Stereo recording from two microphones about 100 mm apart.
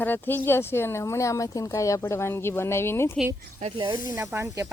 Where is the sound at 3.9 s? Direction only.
35° right (ahead or behind).